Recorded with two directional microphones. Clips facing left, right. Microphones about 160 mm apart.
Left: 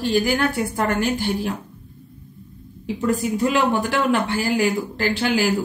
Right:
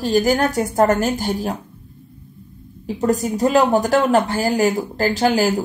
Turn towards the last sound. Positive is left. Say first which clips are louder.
# right 4 dB
turn(degrees=-40)  # may be behind; listen again after turning